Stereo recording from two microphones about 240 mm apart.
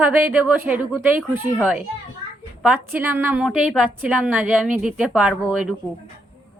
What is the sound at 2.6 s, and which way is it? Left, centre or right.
A woman's voice, centre.